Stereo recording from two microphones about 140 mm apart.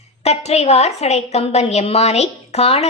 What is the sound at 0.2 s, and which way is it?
A woman's voice, 50° left (ahead or behind).